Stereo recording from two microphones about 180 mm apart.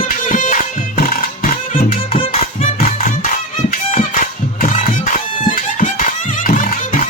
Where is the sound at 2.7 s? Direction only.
50° left (ahead or behind).